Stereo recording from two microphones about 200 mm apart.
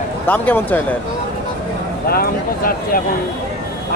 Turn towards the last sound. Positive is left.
turn(degrees=45)  # may be behind; listen again after turning